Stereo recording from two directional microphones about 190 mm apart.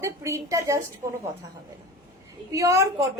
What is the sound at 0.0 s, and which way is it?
Speech, 15° right (ahead or behind).